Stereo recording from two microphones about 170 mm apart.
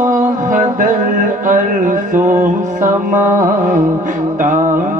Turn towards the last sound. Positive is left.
turn(degrees=-50)  # may be behind; listen again after turning